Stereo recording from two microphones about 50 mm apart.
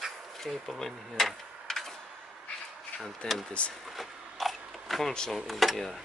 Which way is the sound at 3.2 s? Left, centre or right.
Centre.